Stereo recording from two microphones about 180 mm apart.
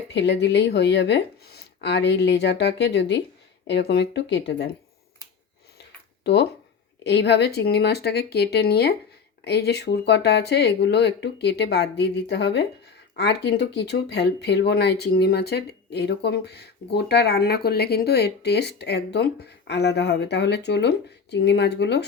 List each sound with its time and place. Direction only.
0.1 s speech: 75° left (ahead or behind)
6.2 s speech: 70° left (ahead or behind)